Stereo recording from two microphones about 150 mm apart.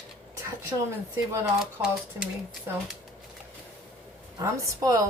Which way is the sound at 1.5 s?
5° right (ahead or behind).